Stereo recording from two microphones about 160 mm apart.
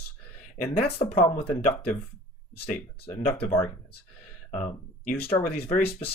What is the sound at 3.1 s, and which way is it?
Speech, 35° left (ahead or behind).